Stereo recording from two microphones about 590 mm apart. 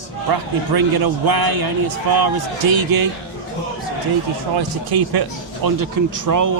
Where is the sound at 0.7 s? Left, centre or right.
Right.